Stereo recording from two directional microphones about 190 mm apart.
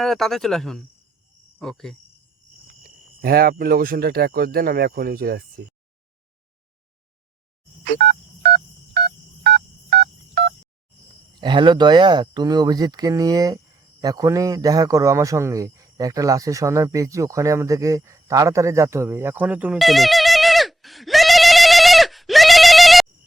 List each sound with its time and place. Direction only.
0.0 s speech: centre (ahead or behind)
2.8 s cricket: 50° right (ahead or behind)
3.6 s speech: 50° right (ahead or behind)
7.9 s telephone dialing: 60° right (ahead or behind)
11.3 s a man's voice: 25° right (ahead or behind); by 23.0 s centre (ahead or behind)